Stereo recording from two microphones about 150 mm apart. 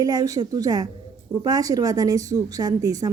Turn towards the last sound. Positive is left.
turn(degrees=-25)  # may be behind; listen again after turning